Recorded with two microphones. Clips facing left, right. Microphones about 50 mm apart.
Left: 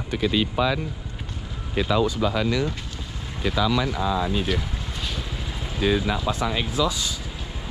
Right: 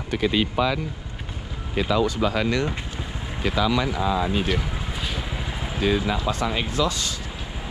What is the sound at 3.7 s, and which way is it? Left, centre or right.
Speech, right.